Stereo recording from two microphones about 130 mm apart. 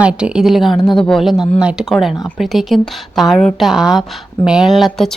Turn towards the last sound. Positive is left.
turn(degrees=0)  # may be behind; listen again after turning